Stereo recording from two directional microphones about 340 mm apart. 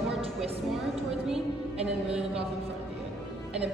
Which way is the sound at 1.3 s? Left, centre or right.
Centre.